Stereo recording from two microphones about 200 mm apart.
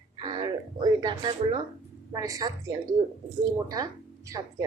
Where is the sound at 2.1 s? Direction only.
20° right (ahead or behind).